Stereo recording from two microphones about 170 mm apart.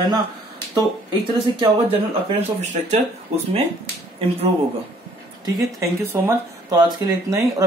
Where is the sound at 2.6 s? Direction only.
40° right (ahead or behind).